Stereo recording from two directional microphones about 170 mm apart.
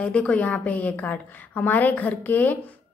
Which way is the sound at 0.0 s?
5° left (ahead or behind).